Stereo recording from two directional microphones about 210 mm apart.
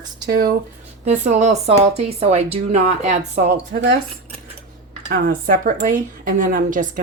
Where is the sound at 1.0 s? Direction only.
35° right (ahead or behind).